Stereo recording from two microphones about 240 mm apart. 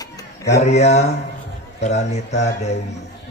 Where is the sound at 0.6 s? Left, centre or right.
Left.